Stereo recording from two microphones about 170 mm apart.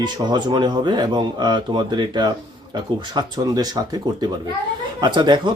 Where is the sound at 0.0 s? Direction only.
25° right (ahead or behind).